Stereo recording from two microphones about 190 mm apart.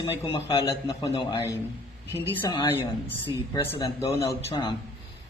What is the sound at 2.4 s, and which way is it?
A man's voice, 25° left (ahead or behind).